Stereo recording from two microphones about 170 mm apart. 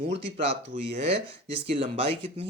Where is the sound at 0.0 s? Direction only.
35° right (ahead or behind).